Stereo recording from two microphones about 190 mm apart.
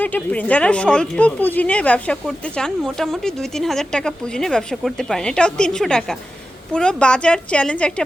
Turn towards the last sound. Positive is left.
turn(degrees=5)  # may be behind; listen again after turning